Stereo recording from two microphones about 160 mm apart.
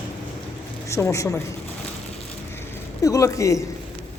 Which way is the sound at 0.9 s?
20° left (ahead or behind).